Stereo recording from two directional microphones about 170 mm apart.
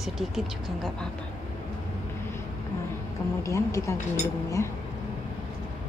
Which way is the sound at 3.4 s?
20° left (ahead or behind).